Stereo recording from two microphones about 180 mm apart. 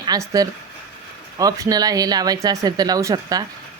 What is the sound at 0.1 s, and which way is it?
Speech, 20° right (ahead or behind).